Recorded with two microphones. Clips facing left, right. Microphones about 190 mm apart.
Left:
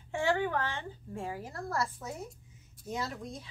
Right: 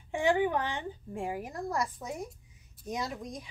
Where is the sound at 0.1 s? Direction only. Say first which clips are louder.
Right 3 dB; 15° right (ahead or behind).